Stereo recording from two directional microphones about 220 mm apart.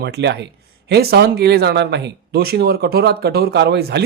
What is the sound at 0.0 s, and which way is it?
Speech, 50° right (ahead or behind).